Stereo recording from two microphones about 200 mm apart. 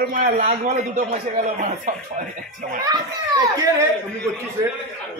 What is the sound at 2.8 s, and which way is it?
Speech, 20° right (ahead or behind).